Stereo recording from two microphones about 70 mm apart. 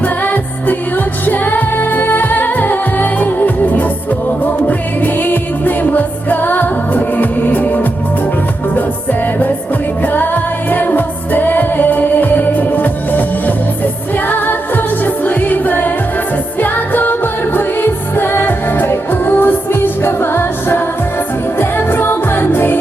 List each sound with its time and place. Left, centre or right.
0.0 s music: left
5.0 s music: left
10.0 s music: left
14.3 s music: left